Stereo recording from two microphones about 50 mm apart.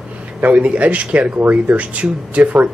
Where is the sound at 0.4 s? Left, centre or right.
Right.